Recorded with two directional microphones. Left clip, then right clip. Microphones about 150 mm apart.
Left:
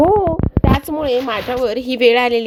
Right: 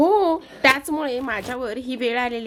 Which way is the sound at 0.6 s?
15° left (ahead or behind).